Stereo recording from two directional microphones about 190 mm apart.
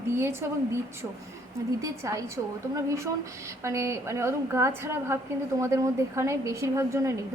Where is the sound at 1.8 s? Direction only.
15° right (ahead or behind).